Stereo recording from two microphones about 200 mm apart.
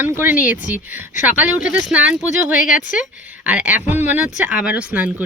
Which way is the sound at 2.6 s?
40° left (ahead or behind).